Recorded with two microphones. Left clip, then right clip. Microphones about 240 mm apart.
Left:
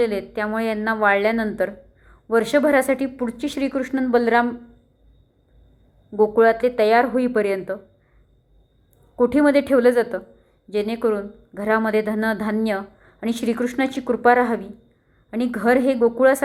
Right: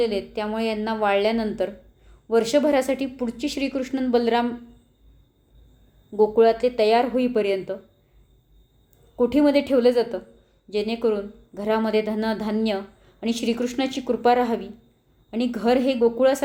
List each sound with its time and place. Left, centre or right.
0.0 s a woman's voice: centre
6.1 s a woman's voice: centre
9.1 s a woman's voice: centre